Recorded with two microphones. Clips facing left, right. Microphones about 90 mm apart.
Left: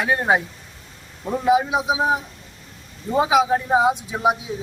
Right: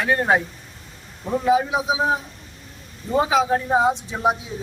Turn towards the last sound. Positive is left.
turn(degrees=5)  # may be behind; listen again after turning